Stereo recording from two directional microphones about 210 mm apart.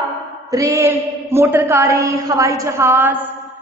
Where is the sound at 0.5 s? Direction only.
15° right (ahead or behind).